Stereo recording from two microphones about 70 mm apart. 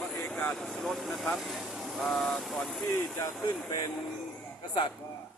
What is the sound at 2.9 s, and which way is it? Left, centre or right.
Speech, left.